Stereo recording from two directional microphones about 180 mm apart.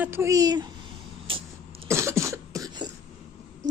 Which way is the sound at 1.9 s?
15° right (ahead or behind).